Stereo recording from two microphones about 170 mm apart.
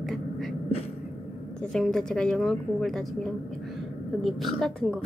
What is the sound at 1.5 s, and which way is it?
A woman's voice, 5° left (ahead or behind).